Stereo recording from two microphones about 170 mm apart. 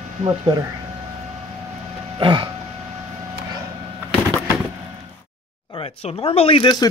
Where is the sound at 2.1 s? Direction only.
30° right (ahead or behind).